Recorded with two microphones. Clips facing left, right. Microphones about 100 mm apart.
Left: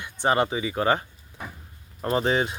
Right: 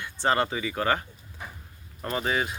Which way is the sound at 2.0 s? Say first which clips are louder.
Left 5 dB; 30° left (ahead or behind).